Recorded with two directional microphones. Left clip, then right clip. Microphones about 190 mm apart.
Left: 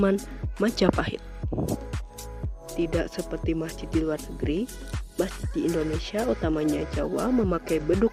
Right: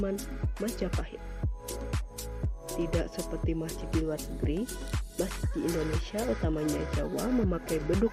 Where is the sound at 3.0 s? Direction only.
50° left (ahead or behind).